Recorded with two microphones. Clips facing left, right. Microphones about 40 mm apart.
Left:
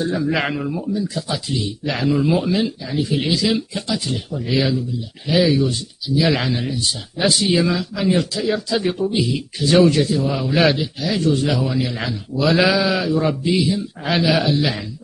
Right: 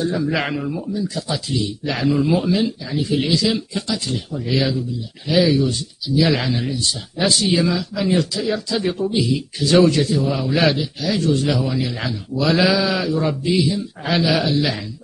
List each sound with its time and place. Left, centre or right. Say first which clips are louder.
0.0 s speech: left 1 dB; centre